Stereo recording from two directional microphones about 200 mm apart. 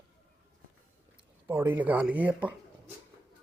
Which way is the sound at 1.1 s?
10° right (ahead or behind).